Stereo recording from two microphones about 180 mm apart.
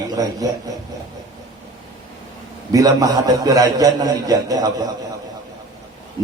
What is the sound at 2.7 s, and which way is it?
A man's voice, 20° right (ahead or behind).